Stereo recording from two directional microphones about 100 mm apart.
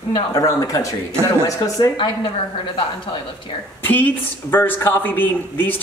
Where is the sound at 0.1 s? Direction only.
35° left (ahead or behind).